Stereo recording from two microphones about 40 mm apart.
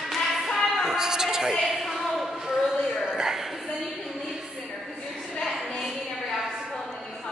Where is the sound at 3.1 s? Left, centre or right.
Centre.